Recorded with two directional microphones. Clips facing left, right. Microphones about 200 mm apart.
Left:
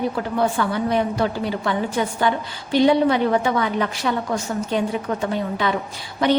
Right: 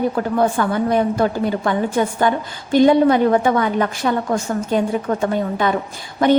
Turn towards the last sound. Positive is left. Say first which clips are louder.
# right 4 dB
turn(degrees=-50)  # may be behind; listen again after turning